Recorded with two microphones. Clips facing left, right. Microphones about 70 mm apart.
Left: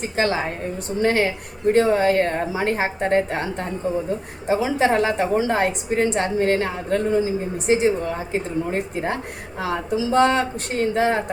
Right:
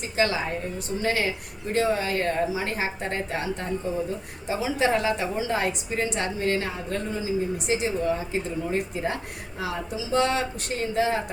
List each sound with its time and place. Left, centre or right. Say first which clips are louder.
0.2 s a woman's voice: left 2 dB; left